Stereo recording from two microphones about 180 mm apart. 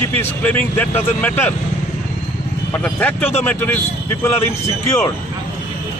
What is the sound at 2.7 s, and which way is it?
Speech, 10° left (ahead or behind).